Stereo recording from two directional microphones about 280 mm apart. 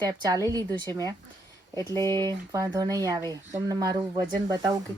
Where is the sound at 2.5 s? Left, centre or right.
Centre.